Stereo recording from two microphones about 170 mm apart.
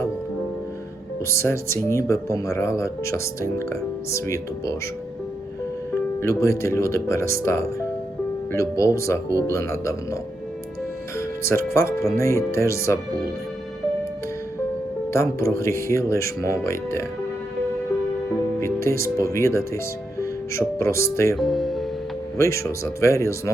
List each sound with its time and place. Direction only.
1.3 s speech: 15° left (ahead or behind)
6.2 s speech: 15° left (ahead or behind)
11.2 s speech: 15° left (ahead or behind)
15.1 s speech: 15° left (ahead or behind)
18.6 s speech: 15° left (ahead or behind)
21.3 s speech: centre (ahead or behind)
22.4 s speech: 15° left (ahead or behind)